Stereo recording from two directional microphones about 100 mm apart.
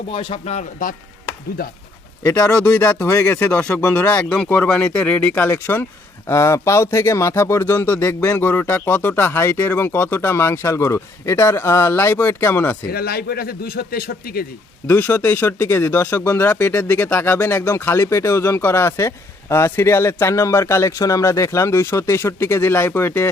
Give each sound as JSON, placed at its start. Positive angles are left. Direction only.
{"t": 0.1, "sound": "speech", "side_deg": 60}
{"t": 2.4, "sound": "speech", "side_deg": 10}
{"t": 14.8, "sound": "speech", "side_deg": 20}